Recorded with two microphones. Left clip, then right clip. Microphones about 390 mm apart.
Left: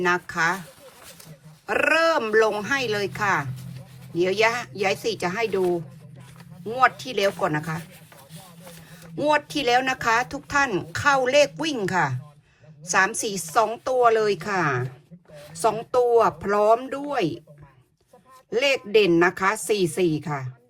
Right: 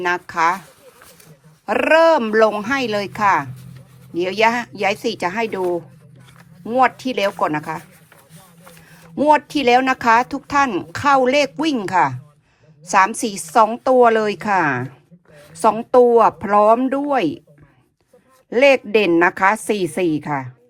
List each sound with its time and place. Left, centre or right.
0.0 s speech: centre
1.6 s speech: centre
6.7 s speech: centre
9.1 s speech: centre
18.5 s speech: centre